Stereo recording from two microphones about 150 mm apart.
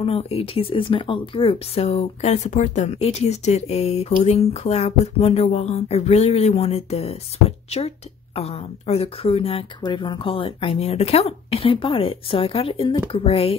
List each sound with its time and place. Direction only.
0.0 s speech: 40° left (ahead or behind)